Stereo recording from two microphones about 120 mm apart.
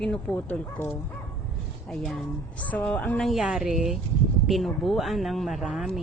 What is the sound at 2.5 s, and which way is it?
Speech, 10° left (ahead or behind).